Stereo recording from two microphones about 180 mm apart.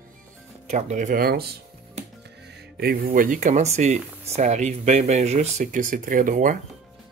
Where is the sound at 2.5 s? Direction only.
60° right (ahead or behind).